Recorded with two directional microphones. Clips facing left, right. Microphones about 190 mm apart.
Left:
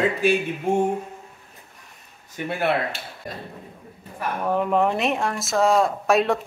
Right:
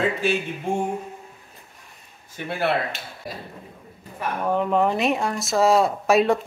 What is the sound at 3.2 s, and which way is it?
Speech, 5° right (ahead or behind).